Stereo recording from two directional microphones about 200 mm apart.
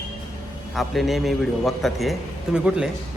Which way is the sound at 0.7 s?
Centre (ahead or behind).